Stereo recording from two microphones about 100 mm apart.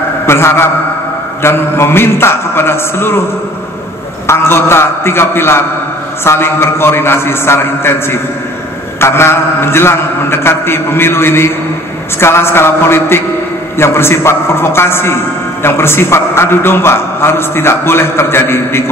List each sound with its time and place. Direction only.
0.3 s a man's voice: 25° left (ahead or behind)
4.3 s a man's voice: 25° left (ahead or behind)